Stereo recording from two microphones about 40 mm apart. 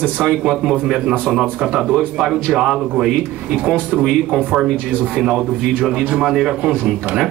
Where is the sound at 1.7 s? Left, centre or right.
Centre.